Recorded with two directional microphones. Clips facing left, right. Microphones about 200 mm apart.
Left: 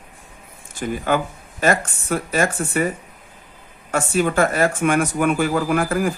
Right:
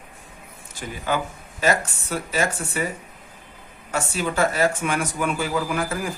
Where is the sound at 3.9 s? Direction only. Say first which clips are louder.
Left 6 dB; 55° left (ahead or behind).